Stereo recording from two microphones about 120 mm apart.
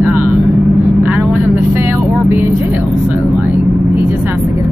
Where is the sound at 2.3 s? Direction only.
15° right (ahead or behind).